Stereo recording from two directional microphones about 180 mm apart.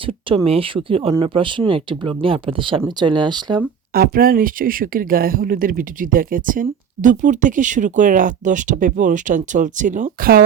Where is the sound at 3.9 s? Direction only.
55° right (ahead or behind).